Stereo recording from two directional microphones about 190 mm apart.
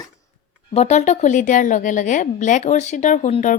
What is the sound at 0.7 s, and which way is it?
A woman's voice, 35° left (ahead or behind).